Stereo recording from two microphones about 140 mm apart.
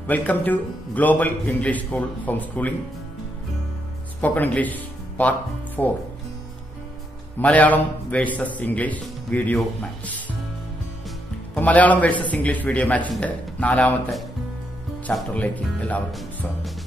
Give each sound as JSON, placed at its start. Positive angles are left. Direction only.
{"t": 0.0, "sound": "a man's voice", "side_deg": 10}
{"t": 4.2, "sound": "a man's voice", "side_deg": 10}
{"t": 7.3, "sound": "a man's voice", "side_deg": 10}
{"t": 11.5, "sound": "a man's voice", "side_deg": 10}
{"t": 15.1, "sound": "a man's voice", "side_deg": 10}
{"t": 16.1, "sound": "speech", "side_deg": 0}